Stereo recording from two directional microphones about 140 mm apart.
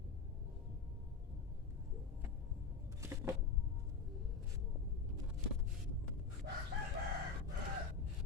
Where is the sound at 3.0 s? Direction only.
20° right (ahead or behind).